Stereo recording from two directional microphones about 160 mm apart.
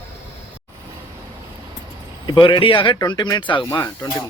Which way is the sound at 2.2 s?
30° left (ahead or behind).